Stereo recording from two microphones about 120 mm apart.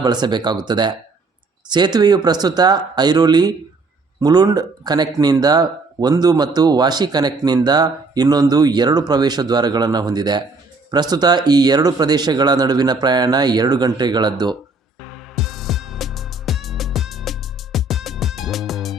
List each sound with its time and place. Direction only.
0.0 s speech: 35° right (ahead or behind)
15.0 s music: centre (ahead or behind)